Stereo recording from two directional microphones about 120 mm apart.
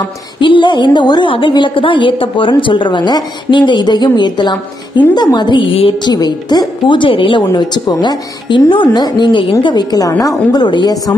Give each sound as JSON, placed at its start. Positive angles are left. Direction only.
{"t": 0.4, "sound": "a woman's voice", "side_deg": 40}